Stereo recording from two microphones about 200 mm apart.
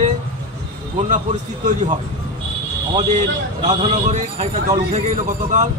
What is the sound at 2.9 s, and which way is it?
Speech, 35° right (ahead or behind).